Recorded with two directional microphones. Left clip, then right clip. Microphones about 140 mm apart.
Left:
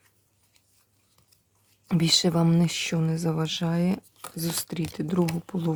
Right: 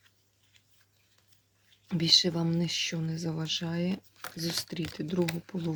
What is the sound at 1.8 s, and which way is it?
Speech, 55° left (ahead or behind).